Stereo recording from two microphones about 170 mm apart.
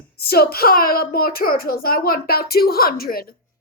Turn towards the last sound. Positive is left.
turn(degrees=60)  # may be behind; listen again after turning